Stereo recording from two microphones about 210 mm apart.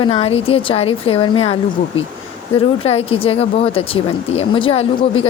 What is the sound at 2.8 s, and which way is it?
Speech, 30° left (ahead or behind).